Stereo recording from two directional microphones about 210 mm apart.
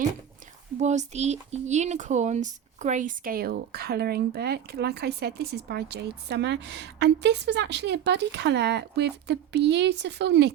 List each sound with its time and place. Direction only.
0.8 s speech: 35° right (ahead or behind); by 10.5 s 55° right (ahead or behind)